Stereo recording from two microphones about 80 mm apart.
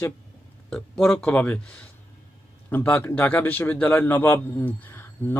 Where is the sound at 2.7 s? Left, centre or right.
Left.